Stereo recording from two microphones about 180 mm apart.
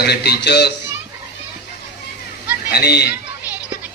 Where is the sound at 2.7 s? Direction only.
60° left (ahead or behind).